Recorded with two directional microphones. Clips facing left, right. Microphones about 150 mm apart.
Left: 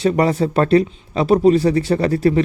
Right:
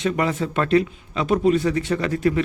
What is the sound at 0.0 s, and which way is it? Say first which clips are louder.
Speech: left 6 dB; 35° left (ahead or behind).